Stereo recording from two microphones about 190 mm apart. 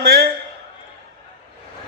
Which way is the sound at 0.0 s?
55° right (ahead or behind).